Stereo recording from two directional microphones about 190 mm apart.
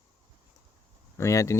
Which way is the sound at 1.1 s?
15° left (ahead or behind).